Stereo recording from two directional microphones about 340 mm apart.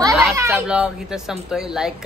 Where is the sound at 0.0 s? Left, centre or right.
Centre.